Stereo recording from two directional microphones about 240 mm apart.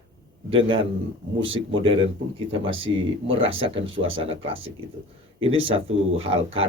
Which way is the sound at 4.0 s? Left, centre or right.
Right.